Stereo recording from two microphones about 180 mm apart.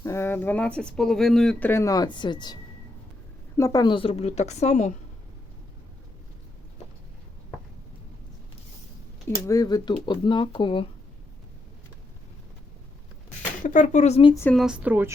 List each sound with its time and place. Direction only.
0.0 s speech: 15° left (ahead or behind)
3.6 s a woman's voice: 20° left (ahead or behind); by 4.9 s 40° left (ahead or behind)
9.2 s speech: 20° left (ahead or behind)
13.7 s a woman's voice: 45° left (ahead or behind)
14.5 s speech: 5° right (ahead or behind)